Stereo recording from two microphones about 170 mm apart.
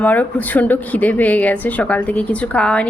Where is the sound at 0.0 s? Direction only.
10° left (ahead or behind).